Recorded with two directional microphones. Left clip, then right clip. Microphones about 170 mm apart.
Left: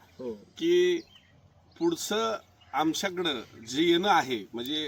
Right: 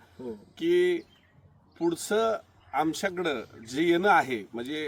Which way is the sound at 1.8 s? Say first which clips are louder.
Right 2 dB; 20° right (ahead or behind).